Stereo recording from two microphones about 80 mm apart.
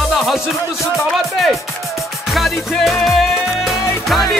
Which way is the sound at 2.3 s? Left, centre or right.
Centre.